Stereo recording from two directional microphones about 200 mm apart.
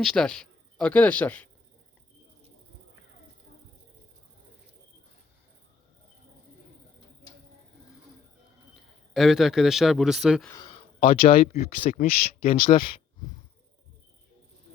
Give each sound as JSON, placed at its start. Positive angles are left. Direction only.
{"t": 0.0, "sound": "speech", "side_deg": 5}
{"t": 8.7, "sound": "a man's voice", "side_deg": 0}
{"t": 10.5, "sound": "a sound", "side_deg": 25}
{"t": 11.1, "sound": "speech", "side_deg": 25}